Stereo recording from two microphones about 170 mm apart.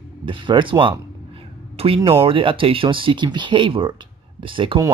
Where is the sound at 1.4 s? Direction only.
35° right (ahead or behind).